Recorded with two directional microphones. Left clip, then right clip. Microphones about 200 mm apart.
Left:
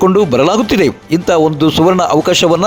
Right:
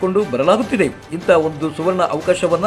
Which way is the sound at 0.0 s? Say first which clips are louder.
Left 6 dB; 40° left (ahead or behind).